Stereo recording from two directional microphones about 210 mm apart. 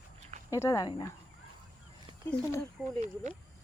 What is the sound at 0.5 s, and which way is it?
Speech, 15° left (ahead or behind).